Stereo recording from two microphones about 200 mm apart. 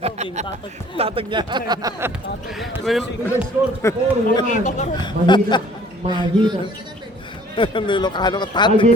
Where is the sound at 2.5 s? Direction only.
Centre (ahead or behind).